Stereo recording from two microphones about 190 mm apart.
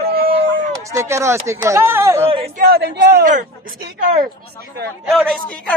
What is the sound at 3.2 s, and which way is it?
Speech, 40° right (ahead or behind).